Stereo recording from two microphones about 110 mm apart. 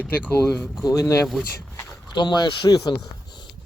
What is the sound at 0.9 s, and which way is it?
Speech, 30° left (ahead or behind).